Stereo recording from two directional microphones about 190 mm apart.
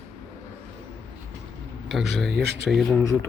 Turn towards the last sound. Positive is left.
turn(degrees=15)  # may be behind; listen again after turning